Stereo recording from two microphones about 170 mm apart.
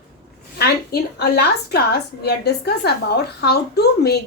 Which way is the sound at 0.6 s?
75° left (ahead or behind).